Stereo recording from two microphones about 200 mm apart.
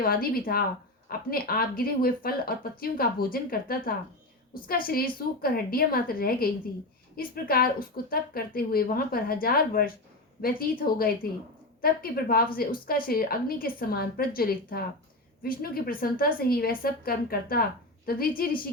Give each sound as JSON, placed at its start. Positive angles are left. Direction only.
{"t": 0.0, "sound": "a woman's voice", "side_deg": 45}